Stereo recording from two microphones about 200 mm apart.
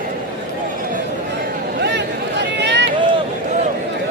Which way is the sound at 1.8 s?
60° right (ahead or behind).